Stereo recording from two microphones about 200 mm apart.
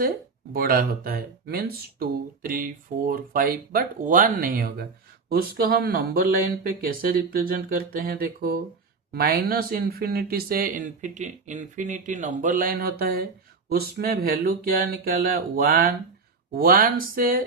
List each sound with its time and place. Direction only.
0.5 s speech: 45° right (ahead or behind)